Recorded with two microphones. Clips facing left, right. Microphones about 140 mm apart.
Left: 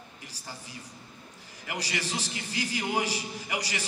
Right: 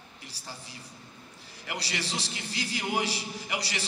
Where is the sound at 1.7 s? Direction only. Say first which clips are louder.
Left 1 dB; 10° left (ahead or behind).